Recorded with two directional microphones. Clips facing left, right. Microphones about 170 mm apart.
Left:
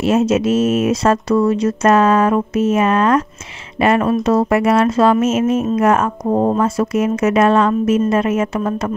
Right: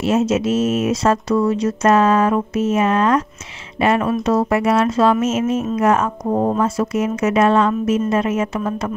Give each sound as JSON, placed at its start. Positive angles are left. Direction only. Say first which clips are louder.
{"t": 0.0, "sound": "speech", "louder": "left 3 dB", "side_deg": 60}